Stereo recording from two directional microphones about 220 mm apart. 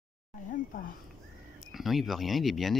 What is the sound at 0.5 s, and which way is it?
Speech, 40° left (ahead or behind).